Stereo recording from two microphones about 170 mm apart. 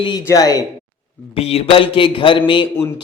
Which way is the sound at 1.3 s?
35° left (ahead or behind).